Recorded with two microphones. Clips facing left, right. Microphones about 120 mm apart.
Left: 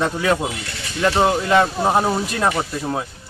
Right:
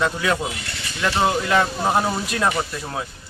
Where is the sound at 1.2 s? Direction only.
20° left (ahead or behind).